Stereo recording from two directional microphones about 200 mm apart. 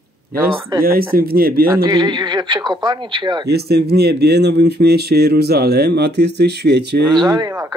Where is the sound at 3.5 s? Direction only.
55° right (ahead or behind).